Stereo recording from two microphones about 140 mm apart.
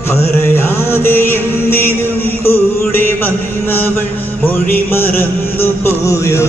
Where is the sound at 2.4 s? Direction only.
15° left (ahead or behind).